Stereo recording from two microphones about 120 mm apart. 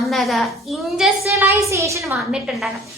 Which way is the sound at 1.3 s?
25° right (ahead or behind).